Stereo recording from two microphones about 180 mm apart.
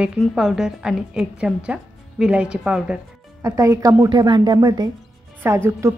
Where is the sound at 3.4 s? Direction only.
15° right (ahead or behind).